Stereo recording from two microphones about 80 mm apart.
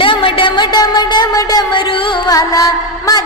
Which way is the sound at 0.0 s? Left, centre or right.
Left.